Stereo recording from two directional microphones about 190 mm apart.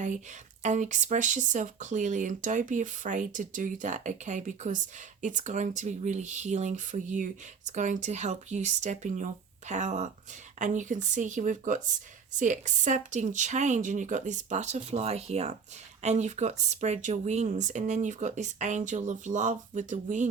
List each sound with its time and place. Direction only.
0.6 s speech: 40° right (ahead or behind)